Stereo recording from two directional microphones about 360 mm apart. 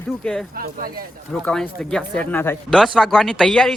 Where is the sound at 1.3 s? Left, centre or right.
Centre.